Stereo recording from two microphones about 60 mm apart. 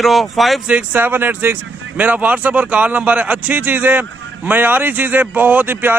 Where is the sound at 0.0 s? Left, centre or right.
Centre.